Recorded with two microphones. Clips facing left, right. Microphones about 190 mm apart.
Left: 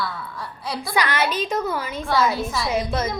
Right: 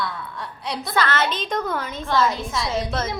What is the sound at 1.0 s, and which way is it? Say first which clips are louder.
A woman's voice: even; 10° left (ahead or behind).